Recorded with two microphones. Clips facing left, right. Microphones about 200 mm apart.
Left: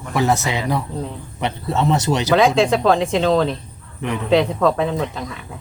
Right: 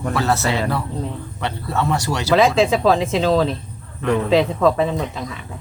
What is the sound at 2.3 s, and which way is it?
Speech, centre (ahead or behind).